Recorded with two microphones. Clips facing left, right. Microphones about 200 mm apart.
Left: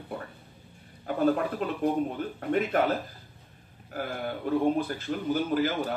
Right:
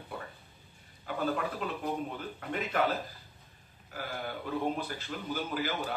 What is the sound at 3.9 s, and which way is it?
Speech, 50° left (ahead or behind).